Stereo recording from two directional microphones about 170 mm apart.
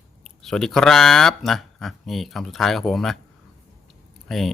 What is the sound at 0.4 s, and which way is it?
Speech, centre (ahead or behind).